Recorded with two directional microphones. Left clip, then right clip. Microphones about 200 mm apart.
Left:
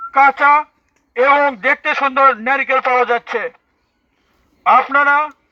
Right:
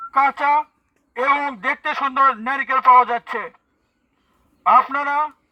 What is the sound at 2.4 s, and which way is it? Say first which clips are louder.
A man's voice: even; 65° right (ahead or behind).